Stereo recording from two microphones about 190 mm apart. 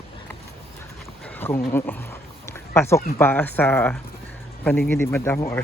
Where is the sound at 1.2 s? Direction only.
10° left (ahead or behind).